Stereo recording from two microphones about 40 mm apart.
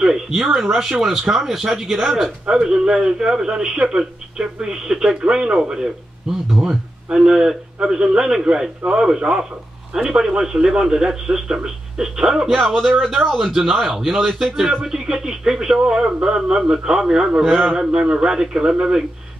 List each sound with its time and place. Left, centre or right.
0.0 s speech: centre
5.2 s a man's voice: right